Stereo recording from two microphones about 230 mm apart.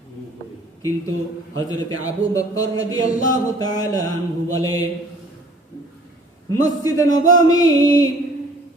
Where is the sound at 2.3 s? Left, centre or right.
Centre.